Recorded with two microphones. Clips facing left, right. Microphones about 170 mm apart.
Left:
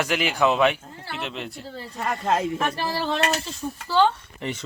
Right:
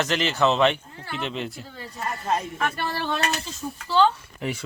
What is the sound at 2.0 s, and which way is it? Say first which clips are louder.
Speech: left 3 dB; 90° left.